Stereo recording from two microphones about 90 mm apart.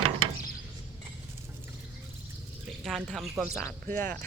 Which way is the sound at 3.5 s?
30° left (ahead or behind).